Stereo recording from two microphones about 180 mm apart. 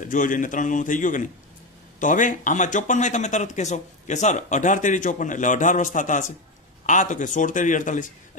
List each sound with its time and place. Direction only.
0.0 s speech: 45° left (ahead or behind)